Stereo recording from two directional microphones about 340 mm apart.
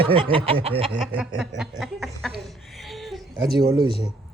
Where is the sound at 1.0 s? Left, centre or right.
Centre.